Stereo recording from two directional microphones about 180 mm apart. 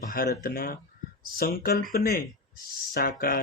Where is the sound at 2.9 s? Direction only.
55° left (ahead or behind).